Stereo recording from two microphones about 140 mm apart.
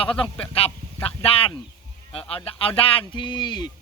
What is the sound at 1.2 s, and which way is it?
Speech, 45° left (ahead or behind).